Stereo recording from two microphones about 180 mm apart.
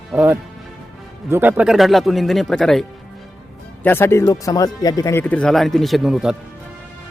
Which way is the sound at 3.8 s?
15° left (ahead or behind).